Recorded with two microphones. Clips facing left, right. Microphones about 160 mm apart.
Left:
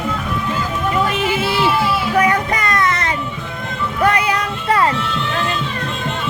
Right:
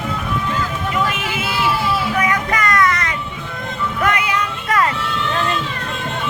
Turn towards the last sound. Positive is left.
turn(degrees=30)  # may be behind; listen again after turning